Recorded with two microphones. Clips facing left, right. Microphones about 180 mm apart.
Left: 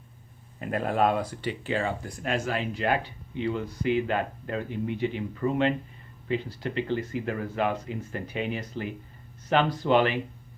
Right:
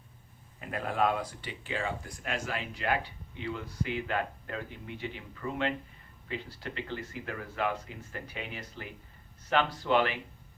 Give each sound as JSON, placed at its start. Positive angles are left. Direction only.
{"t": 0.6, "sound": "speech", "side_deg": 45}